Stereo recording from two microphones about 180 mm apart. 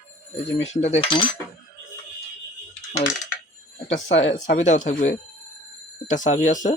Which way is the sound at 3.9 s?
40° left (ahead or behind).